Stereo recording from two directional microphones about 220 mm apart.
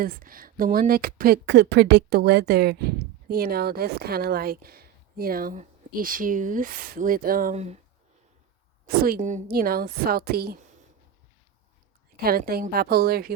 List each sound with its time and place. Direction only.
0.0 s speech: 40° right (ahead or behind)
9.0 s speech: 40° right (ahead or behind)
12.2 s speech: 45° right (ahead or behind)